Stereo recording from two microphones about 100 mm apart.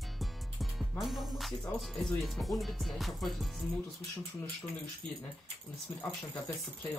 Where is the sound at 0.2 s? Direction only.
Centre (ahead or behind).